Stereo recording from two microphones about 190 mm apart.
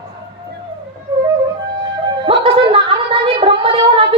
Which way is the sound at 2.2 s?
30° right (ahead or behind).